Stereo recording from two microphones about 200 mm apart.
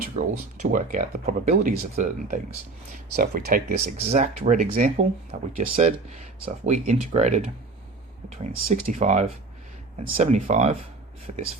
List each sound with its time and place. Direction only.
0.2 s speech: 40° right (ahead or behind)
8.5 s speech: 40° right (ahead or behind)